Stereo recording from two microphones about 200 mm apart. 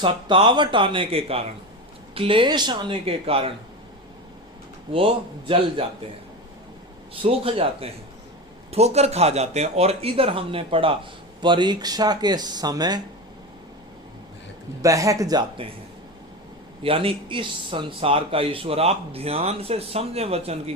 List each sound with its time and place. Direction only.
0.0 s speech: 25° right (ahead or behind)
4.9 s speech: 25° right (ahead or behind)
7.1 s speech: 30° right (ahead or behind)
14.8 s speech: 15° right (ahead or behind)
16.8 s speech: 25° right (ahead or behind)